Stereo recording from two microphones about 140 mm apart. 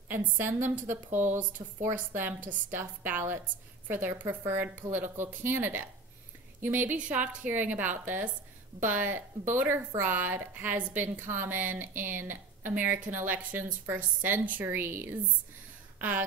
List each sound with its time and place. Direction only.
0.1 s a woman's voice: 15° right (ahead or behind)